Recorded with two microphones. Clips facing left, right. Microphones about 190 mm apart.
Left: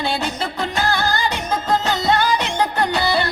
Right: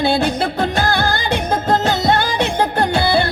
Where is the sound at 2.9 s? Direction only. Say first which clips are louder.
Right 4 dB; 30° right (ahead or behind).